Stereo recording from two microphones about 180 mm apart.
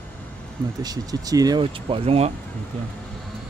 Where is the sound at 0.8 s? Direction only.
20° right (ahead or behind).